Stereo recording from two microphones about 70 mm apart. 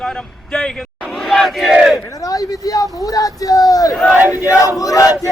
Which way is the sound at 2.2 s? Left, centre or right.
Left.